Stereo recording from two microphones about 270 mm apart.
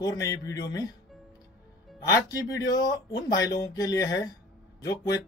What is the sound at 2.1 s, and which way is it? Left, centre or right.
Speech, centre.